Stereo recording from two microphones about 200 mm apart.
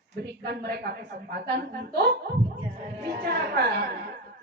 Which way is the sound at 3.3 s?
55° right (ahead or behind).